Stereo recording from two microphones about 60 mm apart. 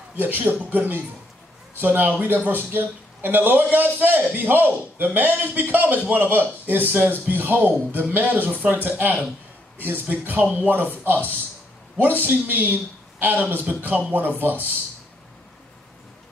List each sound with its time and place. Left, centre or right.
0.1 s a man's voice: right